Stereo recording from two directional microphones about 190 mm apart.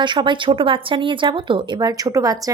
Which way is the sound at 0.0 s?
25° right (ahead or behind).